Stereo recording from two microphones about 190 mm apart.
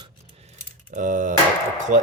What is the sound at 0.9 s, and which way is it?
Speech, 40° right (ahead or behind).